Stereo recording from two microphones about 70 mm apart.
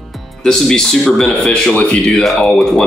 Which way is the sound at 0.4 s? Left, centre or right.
Centre.